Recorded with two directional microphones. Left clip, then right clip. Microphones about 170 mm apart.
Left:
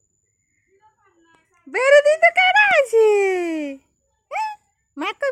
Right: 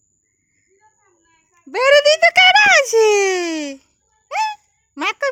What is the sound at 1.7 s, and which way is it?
Speech, 10° right (ahead or behind).